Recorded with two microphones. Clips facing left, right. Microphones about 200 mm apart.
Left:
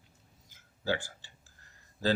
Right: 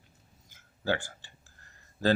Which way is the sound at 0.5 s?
55° right (ahead or behind).